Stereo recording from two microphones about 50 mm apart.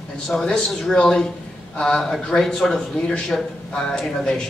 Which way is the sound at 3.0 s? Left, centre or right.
Centre.